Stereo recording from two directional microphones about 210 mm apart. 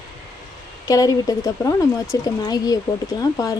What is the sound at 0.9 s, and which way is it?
Speech, 15° left (ahead or behind).